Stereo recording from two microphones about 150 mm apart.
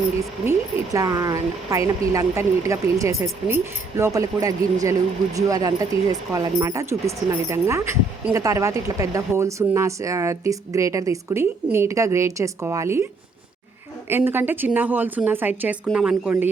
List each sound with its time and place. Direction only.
0.4 s speech: 25° right (ahead or behind)
14.1 s a woman's voice: 15° right (ahead or behind)